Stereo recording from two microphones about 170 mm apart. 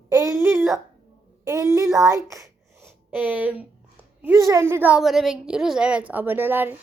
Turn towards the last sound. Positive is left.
turn(degrees=-10)  # may be behind; listen again after turning